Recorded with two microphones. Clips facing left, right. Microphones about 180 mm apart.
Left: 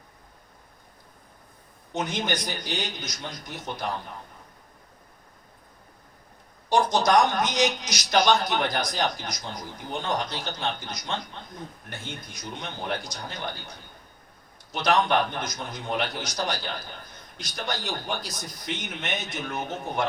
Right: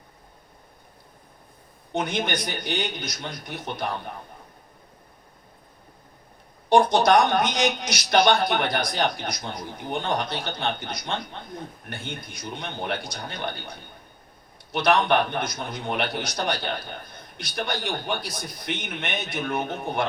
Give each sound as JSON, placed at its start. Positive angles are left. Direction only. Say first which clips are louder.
{"t": 1.9, "sound": "a man's voice", "louder": "right 2 dB", "side_deg": -60}
{"t": 6.7, "sound": "a man's voice", "louder": "right 4 dB", "side_deg": -60}